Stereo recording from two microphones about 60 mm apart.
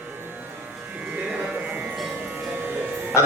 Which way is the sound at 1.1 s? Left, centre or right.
Right.